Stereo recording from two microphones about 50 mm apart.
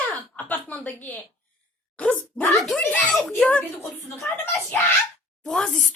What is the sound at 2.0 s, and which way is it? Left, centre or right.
Speech, left.